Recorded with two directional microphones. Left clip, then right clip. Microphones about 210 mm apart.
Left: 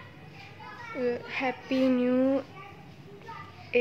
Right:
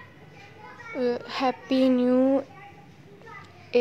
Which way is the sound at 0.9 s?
25° right (ahead or behind).